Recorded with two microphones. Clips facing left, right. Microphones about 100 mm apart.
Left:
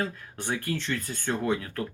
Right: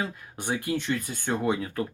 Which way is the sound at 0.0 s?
15° right (ahead or behind).